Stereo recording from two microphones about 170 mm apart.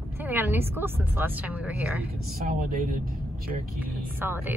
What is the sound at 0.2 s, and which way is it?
Speech, 10° right (ahead or behind).